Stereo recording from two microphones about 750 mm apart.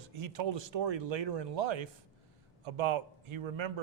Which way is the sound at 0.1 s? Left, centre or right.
Right.